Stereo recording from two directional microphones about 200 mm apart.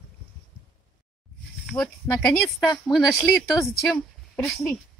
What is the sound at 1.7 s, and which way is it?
Speech, centre (ahead or behind).